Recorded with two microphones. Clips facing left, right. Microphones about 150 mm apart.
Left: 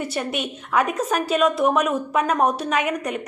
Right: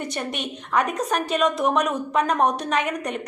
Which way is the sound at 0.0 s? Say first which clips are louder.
Left 3 dB; 5° left (ahead or behind).